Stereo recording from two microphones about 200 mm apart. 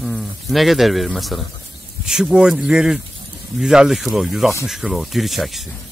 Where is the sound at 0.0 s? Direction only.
Centre (ahead or behind).